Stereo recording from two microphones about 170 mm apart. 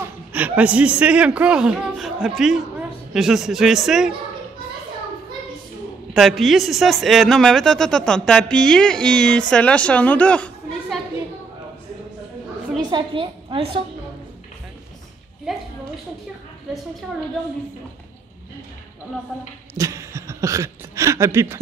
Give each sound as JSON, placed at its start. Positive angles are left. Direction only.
{"t": 0.0, "sound": "a man's voice", "side_deg": -10}
{"t": 6.1, "sound": "a man's voice", "side_deg": 0}
{"t": 12.9, "sound": "a woman's voice", "side_deg": -30}
{"t": 19.7, "sound": "speech", "side_deg": -15}